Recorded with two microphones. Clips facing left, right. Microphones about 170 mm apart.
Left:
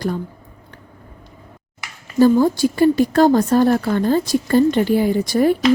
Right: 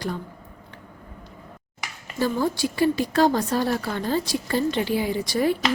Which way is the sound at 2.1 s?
45° left (ahead or behind).